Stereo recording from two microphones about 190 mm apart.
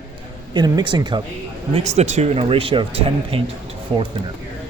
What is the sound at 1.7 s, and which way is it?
Speech, 35° right (ahead or behind).